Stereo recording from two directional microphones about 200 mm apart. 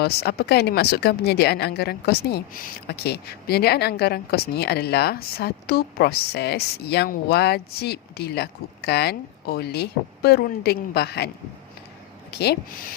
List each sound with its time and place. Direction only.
0.0 s speech: 55° left (ahead or behind)
12.3 s speech: 55° left (ahead or behind)